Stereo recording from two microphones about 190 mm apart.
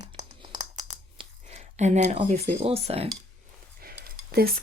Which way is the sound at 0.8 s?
20° right (ahead or behind).